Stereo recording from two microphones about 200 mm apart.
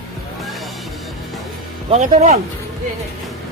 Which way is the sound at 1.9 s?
35° right (ahead or behind).